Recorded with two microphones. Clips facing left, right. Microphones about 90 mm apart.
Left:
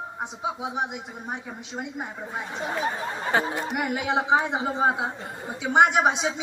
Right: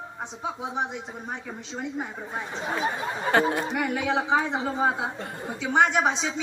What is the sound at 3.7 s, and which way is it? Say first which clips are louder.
A man's voice: even; 15° left (ahead or behind).